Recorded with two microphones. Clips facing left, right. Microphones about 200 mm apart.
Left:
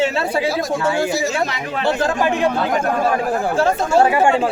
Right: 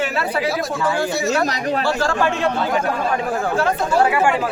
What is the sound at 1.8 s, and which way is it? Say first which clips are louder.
Speech: left 4 dB; 20° left (ahead or behind).